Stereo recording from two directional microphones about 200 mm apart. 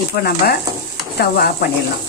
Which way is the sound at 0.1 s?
50° left (ahead or behind).